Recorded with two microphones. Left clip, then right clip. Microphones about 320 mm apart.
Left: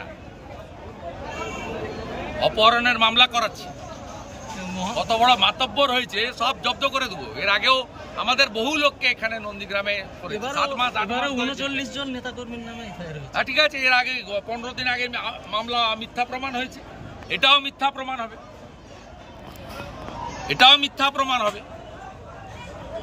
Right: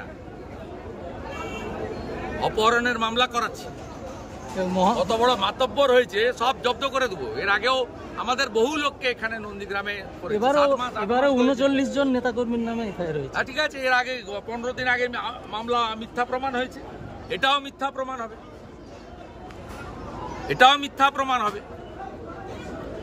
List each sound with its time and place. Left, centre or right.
2.4 s speech: centre
4.6 s a man's voice: centre
4.9 s speech: centre
11.1 s a man's voice: centre
13.3 s speech: centre
20.4 s speech: centre